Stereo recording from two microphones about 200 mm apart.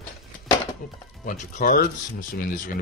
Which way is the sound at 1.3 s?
40° left (ahead or behind).